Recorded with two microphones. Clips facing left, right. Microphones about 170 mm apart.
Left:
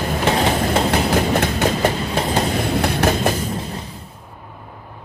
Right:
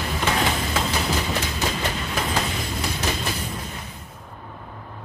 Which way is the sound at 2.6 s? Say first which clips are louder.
Left 9 dB; 65° left (ahead or behind).